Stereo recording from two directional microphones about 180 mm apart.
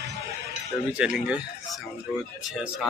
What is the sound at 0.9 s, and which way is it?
A man's voice, 5° right (ahead or behind).